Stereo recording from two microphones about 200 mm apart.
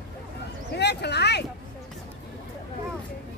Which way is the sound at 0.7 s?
55° left (ahead or behind).